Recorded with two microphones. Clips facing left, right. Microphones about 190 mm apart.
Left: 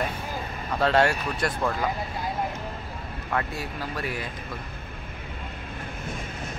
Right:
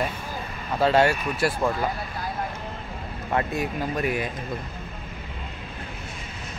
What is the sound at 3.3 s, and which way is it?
Speech, 20° right (ahead or behind).